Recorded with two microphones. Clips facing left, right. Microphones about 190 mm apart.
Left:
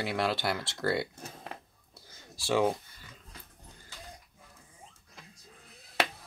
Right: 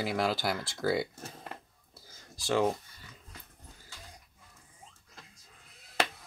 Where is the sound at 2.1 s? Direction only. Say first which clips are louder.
Left 1 dB; centre (ahead or behind).